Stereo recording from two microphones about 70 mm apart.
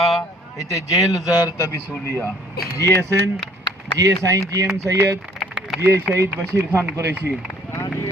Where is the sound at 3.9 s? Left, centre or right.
Right.